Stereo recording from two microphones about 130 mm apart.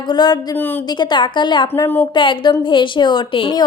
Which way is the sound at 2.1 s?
40° left (ahead or behind).